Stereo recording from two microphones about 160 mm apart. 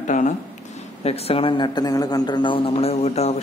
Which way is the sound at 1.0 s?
40° left (ahead or behind).